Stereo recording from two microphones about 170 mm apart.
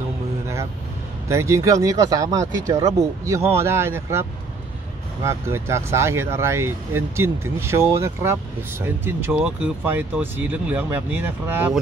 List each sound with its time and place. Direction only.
1.3 s speech: 15° right (ahead or behind)